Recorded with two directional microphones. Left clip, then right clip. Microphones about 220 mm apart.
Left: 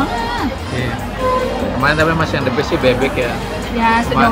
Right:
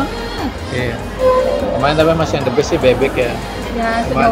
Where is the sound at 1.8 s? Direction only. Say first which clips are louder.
Even; 5° right (ahead or behind).